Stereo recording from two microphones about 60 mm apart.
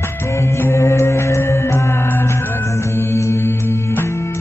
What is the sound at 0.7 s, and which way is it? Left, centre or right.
Music, left.